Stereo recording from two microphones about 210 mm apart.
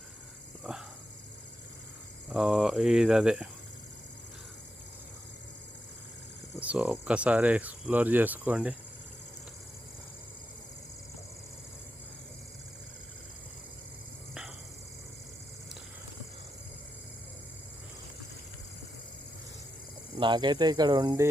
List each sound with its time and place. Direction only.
0.7 s speech: centre (ahead or behind)
2.3 s speech: centre (ahead or behind)
6.6 s speech: 5° right (ahead or behind)
20.1 s speech: 20° right (ahead or behind)